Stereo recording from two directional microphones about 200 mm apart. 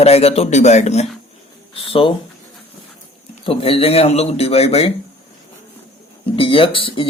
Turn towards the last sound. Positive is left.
turn(degrees=25)  # may be behind; listen again after turning